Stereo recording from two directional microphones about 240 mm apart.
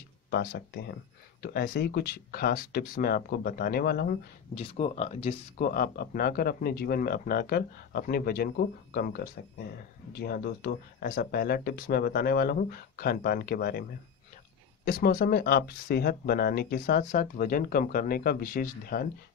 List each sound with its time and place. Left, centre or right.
0.3 s speech: left
4.6 s speech: left
14.9 s speech: left